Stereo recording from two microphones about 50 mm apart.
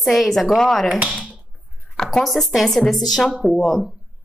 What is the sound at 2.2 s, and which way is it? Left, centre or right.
A woman's voice, centre.